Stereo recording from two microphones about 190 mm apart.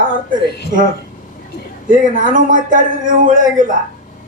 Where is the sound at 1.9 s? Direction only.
45° right (ahead or behind).